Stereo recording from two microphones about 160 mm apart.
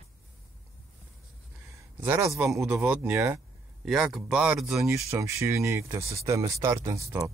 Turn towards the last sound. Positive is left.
turn(degrees=-20)  # may be behind; listen again after turning